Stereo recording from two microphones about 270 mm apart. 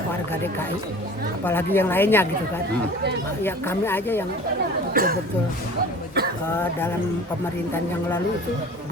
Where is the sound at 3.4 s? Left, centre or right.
Centre.